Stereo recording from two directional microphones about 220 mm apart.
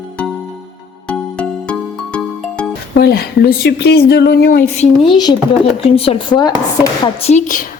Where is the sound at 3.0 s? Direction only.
45° left (ahead or behind).